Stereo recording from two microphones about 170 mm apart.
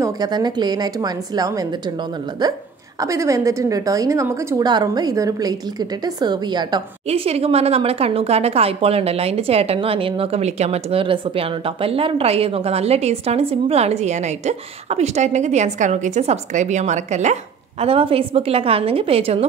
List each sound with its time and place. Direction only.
0.0 s a woman's voice: 25° right (ahead or behind)
7.1 s a woman's voice: 35° right (ahead or behind)